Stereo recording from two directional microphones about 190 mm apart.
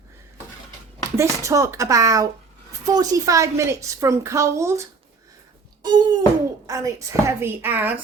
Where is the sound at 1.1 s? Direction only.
15° right (ahead or behind).